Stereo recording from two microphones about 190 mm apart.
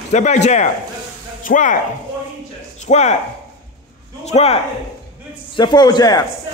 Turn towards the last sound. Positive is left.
turn(degrees=20)  # may be behind; listen again after turning